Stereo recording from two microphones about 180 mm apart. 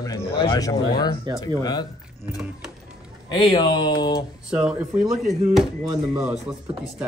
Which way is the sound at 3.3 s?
25° left (ahead or behind).